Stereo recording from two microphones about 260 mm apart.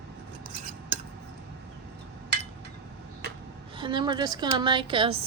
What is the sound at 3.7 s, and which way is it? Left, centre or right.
A woman's voice, centre.